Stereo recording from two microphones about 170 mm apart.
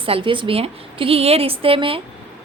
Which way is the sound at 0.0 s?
30° right (ahead or behind).